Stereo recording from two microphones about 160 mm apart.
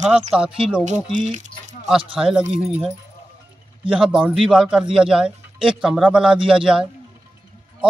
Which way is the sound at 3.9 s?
5° right (ahead or behind).